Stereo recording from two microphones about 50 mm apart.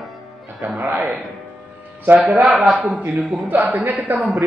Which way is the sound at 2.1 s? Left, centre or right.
Right.